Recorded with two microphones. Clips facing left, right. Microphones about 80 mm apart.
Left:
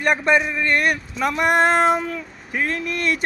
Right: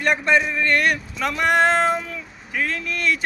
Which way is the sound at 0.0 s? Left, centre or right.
Centre.